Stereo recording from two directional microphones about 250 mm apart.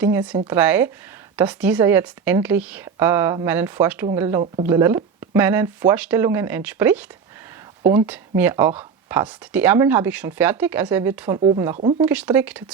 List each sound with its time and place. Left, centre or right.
0.0 s speech: centre
11.3 s speech: right
12.0 s speech: centre